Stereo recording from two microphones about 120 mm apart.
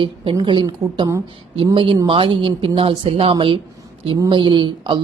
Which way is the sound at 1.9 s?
40° right (ahead or behind).